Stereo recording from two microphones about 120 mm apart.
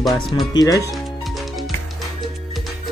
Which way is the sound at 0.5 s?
30° left (ahead or behind).